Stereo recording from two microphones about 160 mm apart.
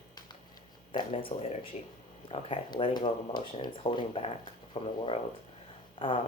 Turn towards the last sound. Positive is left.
turn(degrees=35)  # may be behind; listen again after turning